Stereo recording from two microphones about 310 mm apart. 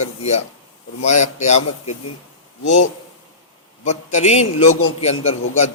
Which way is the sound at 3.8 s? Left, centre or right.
Left.